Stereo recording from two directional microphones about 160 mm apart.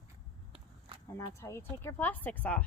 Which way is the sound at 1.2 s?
15° left (ahead or behind).